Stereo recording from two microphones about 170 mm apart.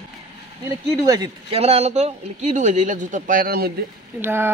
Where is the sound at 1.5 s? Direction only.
35° right (ahead or behind); by 3.7 s 60° right (ahead or behind).